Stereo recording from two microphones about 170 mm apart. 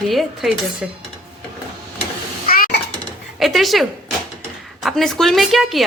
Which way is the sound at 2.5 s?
60° left (ahead or behind).